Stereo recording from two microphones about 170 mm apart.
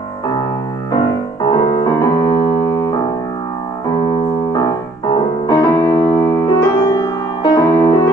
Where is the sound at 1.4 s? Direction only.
30° left (ahead or behind).